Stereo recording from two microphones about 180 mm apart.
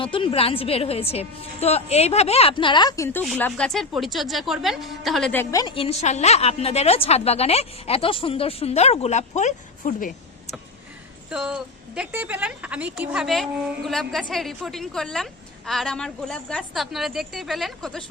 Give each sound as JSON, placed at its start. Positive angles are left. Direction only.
{"t": 0.0, "sound": "a woman's voice", "side_deg": 30}
{"t": 5.7, "sound": "a woman's voice", "side_deg": 35}
{"t": 11.3, "sound": "a woman's voice", "side_deg": -5}